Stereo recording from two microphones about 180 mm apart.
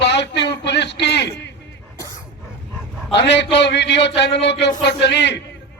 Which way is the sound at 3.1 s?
75° left (ahead or behind).